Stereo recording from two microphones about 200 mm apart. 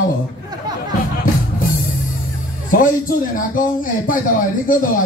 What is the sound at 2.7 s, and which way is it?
Speech, 40° left (ahead or behind).